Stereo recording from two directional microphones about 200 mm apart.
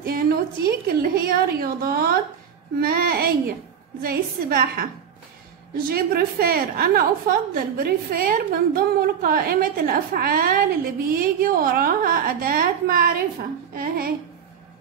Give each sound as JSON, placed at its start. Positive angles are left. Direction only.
{"t": 0.0, "sound": "a woman's voice", "side_deg": -50}